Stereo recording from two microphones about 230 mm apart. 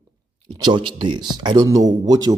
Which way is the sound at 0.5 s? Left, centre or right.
Centre.